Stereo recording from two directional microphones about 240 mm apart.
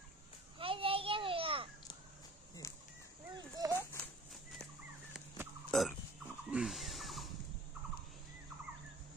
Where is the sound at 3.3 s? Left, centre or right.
Centre.